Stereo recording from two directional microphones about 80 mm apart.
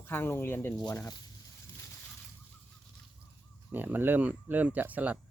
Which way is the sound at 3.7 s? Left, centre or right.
Right.